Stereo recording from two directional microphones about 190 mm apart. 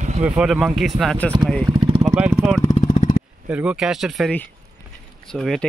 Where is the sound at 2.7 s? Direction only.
40° left (ahead or behind).